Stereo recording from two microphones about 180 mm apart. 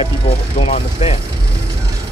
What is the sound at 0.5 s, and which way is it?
Speech, 30° left (ahead or behind).